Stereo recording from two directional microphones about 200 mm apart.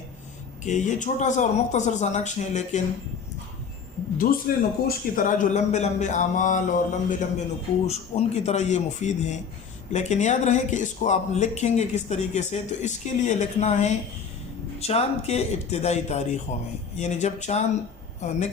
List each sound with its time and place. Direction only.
0.6 s speech: 35° left (ahead or behind)
4.2 s speech: 45° left (ahead or behind)